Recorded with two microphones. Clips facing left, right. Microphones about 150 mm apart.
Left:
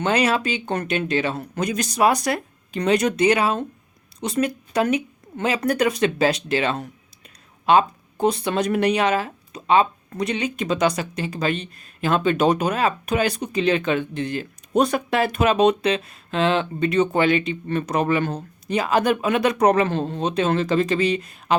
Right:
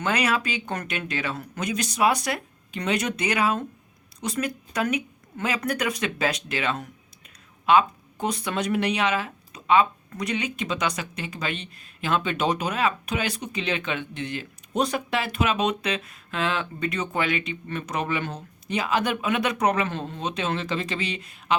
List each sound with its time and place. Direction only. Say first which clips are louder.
0.0 s speech: left 4 dB; 30° left (ahead or behind)
8.6 s speech: left 4 dB; 45° left (ahead or behind)